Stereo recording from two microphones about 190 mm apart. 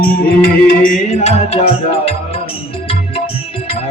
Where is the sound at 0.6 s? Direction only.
40° left (ahead or behind).